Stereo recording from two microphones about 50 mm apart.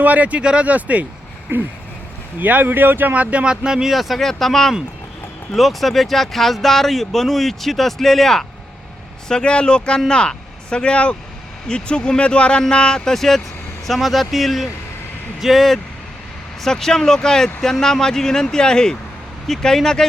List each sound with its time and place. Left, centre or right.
0.0 s speech: right
1.5 s a sound: right
2.4 s speech: right
3.1 s speech: right
3.4 s speech: centre
3.9 s speech: centre
9.3 s speech: left
13.1 s speech: centre